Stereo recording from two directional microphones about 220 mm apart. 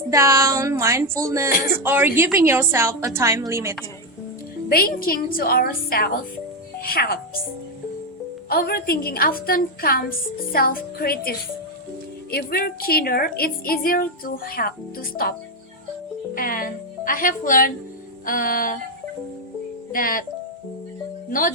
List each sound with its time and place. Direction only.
0.1 s a woman's voice: 15° right (ahead or behind)
4.7 s a woman's voice: 40° left (ahead or behind)
8.4 s a woman's voice: 45° left (ahead or behind)
16.3 s a woman's voice: 40° left (ahead or behind)
19.9 s a woman's voice: 40° left (ahead or behind)
21.2 s speech: 40° left (ahead or behind)